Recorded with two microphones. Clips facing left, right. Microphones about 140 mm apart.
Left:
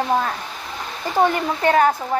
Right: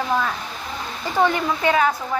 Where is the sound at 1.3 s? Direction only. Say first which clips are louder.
Left 2 dB; 45° left (ahead or behind).